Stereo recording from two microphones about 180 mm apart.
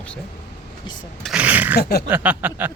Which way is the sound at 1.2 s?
5° right (ahead or behind).